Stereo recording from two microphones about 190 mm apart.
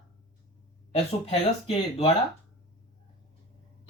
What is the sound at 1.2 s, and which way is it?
Speech, 30° left (ahead or behind).